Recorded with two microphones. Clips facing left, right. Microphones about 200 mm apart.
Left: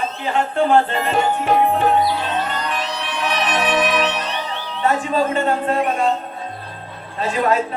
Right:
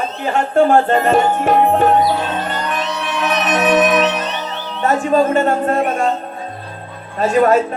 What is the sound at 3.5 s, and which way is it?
Music, 45° right (ahead or behind).